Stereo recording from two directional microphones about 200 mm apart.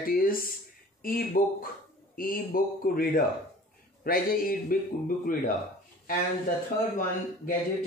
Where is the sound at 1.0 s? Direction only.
45° left (ahead or behind).